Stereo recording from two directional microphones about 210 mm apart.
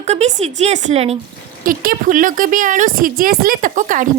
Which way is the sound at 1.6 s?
40° right (ahead or behind).